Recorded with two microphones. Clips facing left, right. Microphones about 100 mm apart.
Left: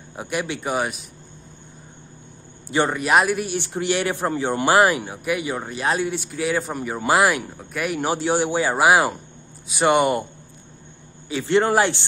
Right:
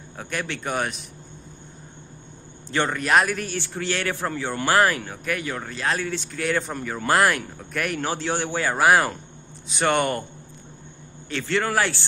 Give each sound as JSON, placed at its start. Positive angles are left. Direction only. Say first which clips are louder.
{"t": 0.1, "sound": "speech", "louder": "left 4 dB", "side_deg": 15}
{"t": 2.7, "sound": "speech", "louder": "left 2 dB", "side_deg": 15}
{"t": 11.2, "sound": "a man's voice", "louder": "left 6 dB", "side_deg": 15}